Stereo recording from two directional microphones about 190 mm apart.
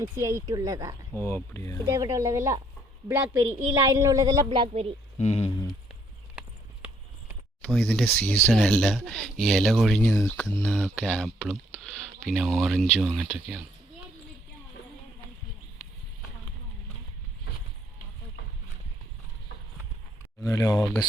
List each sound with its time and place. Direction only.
0.0 s a woman's voice: 15° right (ahead or behind)
1.2 s speech: 10° left (ahead or behind)
1.9 s a woman's voice: 15° right (ahead or behind)
4.4 s a woman's voice: 30° right (ahead or behind)
5.2 s speech: 35° left (ahead or behind)
7.6 s speech: 5° left (ahead or behind)
20.4 s speech: 15° left (ahead or behind)